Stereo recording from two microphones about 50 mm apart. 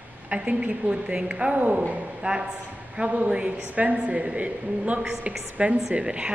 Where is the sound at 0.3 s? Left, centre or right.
Right.